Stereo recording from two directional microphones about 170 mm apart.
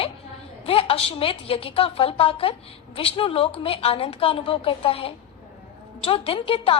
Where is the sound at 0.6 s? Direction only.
35° left (ahead or behind).